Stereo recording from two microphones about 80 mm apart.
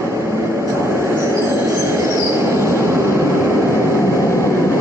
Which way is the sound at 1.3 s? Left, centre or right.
Right.